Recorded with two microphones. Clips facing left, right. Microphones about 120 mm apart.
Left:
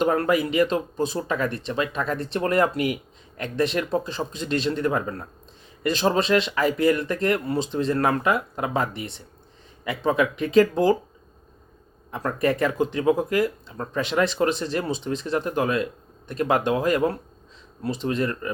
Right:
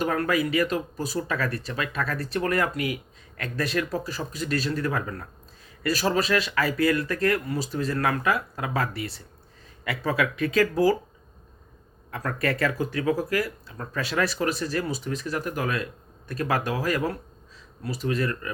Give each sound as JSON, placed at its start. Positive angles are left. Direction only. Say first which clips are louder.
{"t": 0.0, "sound": "speech", "louder": "left 4 dB", "side_deg": 25}
{"t": 12.1, "sound": "speech", "louder": "left 4 dB", "side_deg": 20}